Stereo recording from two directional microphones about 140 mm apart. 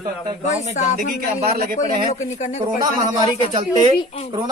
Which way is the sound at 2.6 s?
25° right (ahead or behind).